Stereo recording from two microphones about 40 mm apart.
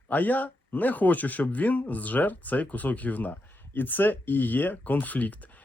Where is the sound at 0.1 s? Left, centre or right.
Left.